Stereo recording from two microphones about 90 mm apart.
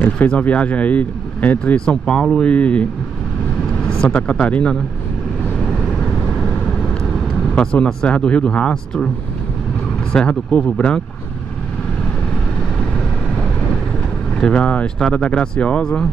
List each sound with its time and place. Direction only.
0.0 s speech: 15° left (ahead or behind)
4.0 s speech: 15° left (ahead or behind)
7.5 s speech: 10° left (ahead or behind)
10.1 s speech: 10° left (ahead or behind)
14.4 s speech: 15° left (ahead or behind)